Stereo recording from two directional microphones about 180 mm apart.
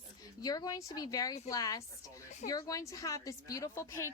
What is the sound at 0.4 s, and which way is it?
A woman's voice, 20° left (ahead or behind).